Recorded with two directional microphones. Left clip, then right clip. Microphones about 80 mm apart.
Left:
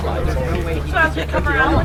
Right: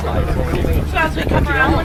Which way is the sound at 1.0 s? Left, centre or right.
Right.